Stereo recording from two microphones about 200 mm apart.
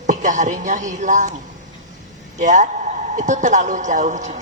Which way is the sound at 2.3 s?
40° right (ahead or behind).